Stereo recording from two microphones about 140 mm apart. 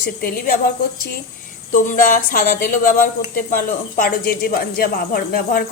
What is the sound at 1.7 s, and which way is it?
A woman's voice, 70° left (ahead or behind).